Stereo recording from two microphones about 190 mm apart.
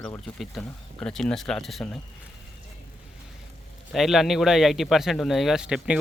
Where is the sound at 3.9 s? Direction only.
Centre (ahead or behind).